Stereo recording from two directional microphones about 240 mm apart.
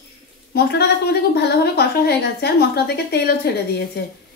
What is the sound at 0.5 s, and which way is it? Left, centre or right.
Speech, left.